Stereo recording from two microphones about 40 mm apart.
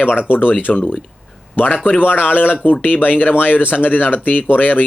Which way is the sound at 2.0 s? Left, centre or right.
Left.